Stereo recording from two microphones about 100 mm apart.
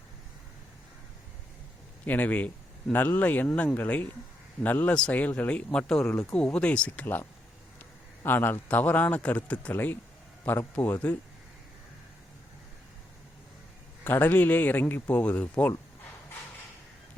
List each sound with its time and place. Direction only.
2.0 s speech: 15° left (ahead or behind)
14.0 s speech: 20° left (ahead or behind)